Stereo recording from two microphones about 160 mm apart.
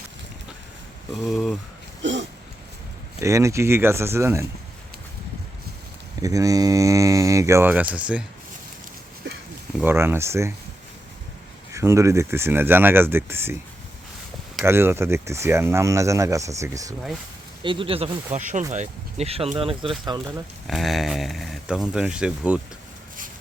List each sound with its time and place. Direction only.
1.1 s speech: centre (ahead or behind)
3.2 s speech: 20° right (ahead or behind)
6.2 s speech: 20° right (ahead or behind)
9.8 s speech: 15° right (ahead or behind)
11.7 s speech: 20° right (ahead or behind)
14.6 s speech: 15° right (ahead or behind)
17.6 s speech: 30° right (ahead or behind)
20.1 s speech: 25° right (ahead or behind)
20.7 s speech: centre (ahead or behind)